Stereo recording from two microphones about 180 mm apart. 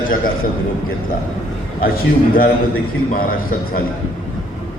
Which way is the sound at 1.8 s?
55° left (ahead or behind).